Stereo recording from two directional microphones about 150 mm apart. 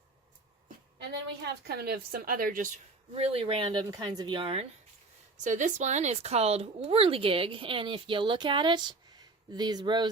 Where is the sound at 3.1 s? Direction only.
40° right (ahead or behind).